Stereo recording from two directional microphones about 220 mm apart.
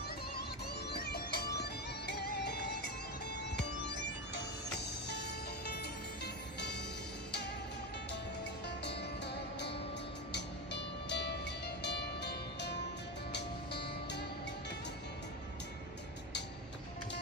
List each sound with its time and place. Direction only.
0.4 s music: 45° left (ahead or behind)
6.2 s music: 50° left (ahead or behind)
8.6 s music: 50° left (ahead or behind)